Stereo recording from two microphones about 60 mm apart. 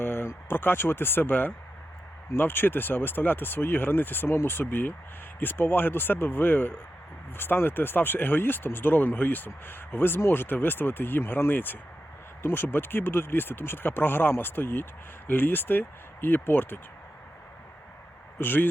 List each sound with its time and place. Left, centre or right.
0.0 s speech: left
18.3 s speech: left